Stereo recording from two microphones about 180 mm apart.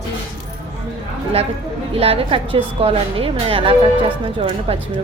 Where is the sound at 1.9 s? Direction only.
30° right (ahead or behind).